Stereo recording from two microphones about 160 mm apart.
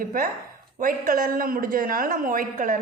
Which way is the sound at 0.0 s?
60° right (ahead or behind).